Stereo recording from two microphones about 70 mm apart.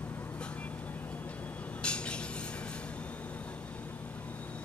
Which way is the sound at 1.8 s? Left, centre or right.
Centre.